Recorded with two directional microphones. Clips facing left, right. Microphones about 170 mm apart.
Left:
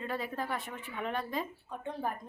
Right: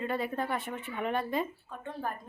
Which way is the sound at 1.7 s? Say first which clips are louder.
Left 1 dB; 15° left (ahead or behind).